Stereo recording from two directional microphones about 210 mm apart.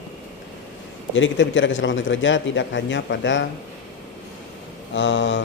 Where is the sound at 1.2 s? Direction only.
60° left (ahead or behind).